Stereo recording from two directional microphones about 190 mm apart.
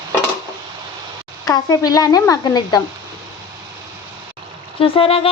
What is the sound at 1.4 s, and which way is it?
A woman's voice, 20° left (ahead or behind).